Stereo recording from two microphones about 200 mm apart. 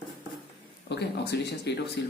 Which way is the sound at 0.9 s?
55° left (ahead or behind).